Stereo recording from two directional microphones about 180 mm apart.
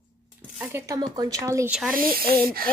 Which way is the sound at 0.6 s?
15° right (ahead or behind).